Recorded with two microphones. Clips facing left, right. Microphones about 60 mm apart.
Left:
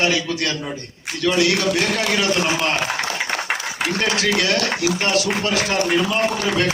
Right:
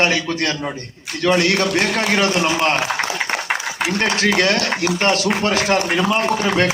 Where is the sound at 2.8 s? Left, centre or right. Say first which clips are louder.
Right 2 dB; centre.